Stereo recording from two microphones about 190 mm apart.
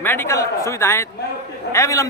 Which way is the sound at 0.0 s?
10° left (ahead or behind).